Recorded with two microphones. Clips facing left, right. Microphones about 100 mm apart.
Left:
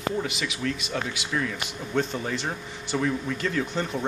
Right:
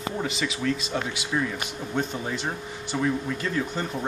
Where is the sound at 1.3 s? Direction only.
15° right (ahead or behind).